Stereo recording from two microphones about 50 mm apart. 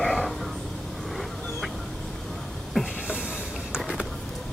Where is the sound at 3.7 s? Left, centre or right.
Centre.